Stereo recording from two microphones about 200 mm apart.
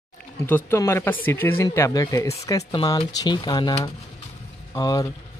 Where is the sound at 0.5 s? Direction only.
10° left (ahead or behind).